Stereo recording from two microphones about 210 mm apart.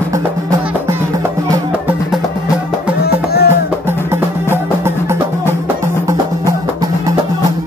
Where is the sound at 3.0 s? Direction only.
50° left (ahead or behind).